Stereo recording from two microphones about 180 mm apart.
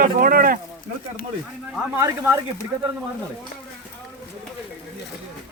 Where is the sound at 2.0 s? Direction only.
15° right (ahead or behind).